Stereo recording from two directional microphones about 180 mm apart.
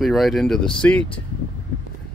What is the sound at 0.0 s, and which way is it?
Speech, centre (ahead or behind).